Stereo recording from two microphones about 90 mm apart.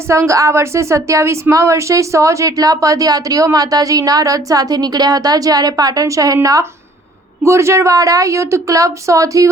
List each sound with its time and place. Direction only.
0.1 s a woman's voice: 35° right (ahead or behind)